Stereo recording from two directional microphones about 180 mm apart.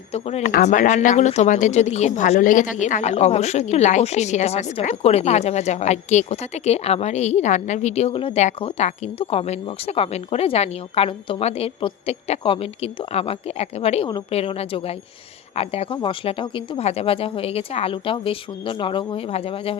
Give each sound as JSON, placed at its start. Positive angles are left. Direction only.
{"t": 0.1, "sound": "speech", "side_deg": 35}